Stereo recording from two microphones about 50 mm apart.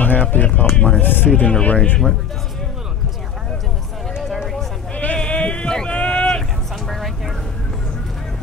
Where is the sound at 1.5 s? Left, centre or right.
Left.